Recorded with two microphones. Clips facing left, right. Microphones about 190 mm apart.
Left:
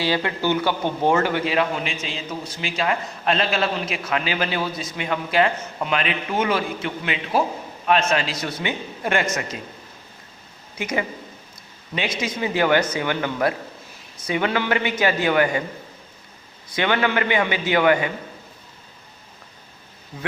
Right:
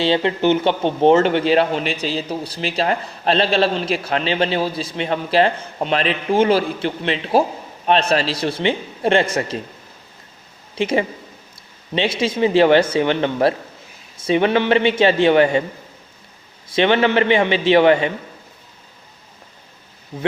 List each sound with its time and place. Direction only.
0.0 s a man's voice: 25° right (ahead or behind)
10.8 s a man's voice: 30° right (ahead or behind)
16.6 s a man's voice: 25° right (ahead or behind)